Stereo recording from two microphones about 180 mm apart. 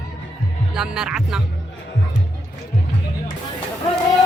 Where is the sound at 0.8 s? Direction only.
5° right (ahead or behind).